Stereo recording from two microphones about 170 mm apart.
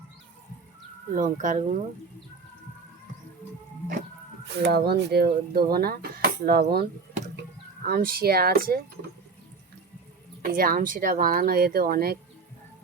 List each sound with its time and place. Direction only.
1.1 s speech: 50° right (ahead or behind)
4.6 s speech: 70° right (ahead or behind)
7.9 s speech: 60° right (ahead or behind)
10.4 s speech: 55° right (ahead or behind)